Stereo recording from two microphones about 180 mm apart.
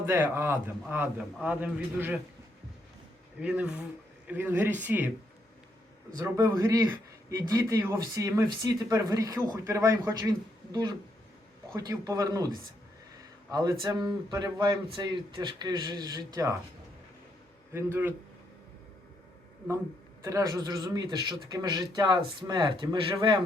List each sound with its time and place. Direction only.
0.0 s speech: 15° right (ahead or behind)
3.4 s speech: 5° right (ahead or behind)
6.1 s a man's voice: 15° right (ahead or behind)
13.5 s a man's voice: 20° right (ahead or behind)
17.7 s speech: 15° right (ahead or behind)
20.2 s a man's voice: 20° right (ahead or behind)